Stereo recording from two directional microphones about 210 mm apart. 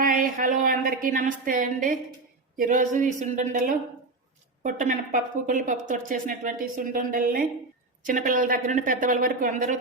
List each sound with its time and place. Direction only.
0.0 s speech: 40° right (ahead or behind)